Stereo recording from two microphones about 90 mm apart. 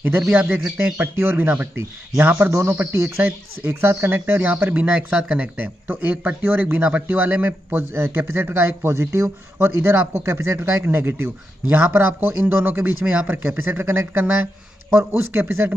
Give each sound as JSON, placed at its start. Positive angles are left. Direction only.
{"t": 0.3, "sound": "speech", "side_deg": -15}
{"t": 3.2, "sound": "speech", "side_deg": -20}